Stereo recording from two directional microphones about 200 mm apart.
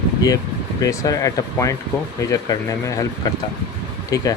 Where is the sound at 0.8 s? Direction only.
15° left (ahead or behind).